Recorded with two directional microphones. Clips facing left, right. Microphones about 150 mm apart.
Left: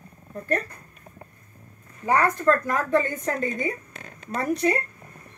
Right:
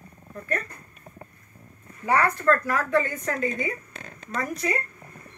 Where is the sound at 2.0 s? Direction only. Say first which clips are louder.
Left 1 dB; 20° left (ahead or behind).